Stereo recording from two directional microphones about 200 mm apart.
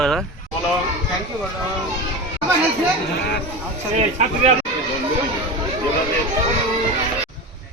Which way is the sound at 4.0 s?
35° right (ahead or behind).